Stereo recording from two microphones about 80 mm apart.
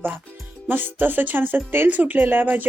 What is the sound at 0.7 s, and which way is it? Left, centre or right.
Speech, right.